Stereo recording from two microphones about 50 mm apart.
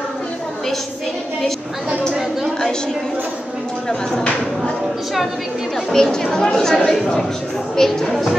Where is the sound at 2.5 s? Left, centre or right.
Centre.